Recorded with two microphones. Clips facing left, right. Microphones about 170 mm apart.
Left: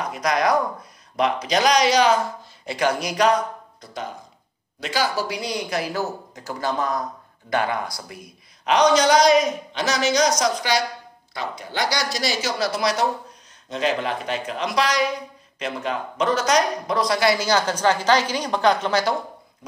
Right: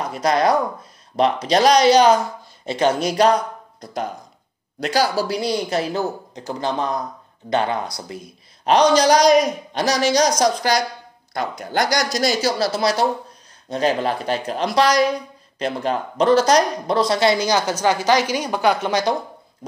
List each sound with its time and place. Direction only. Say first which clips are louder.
0.0 s a man's voice: right 3 dB; 30° right (ahead or behind)
3.8 s a man's voice: right 6 dB; 45° right (ahead or behind); by 19.1 s 15° right (ahead or behind)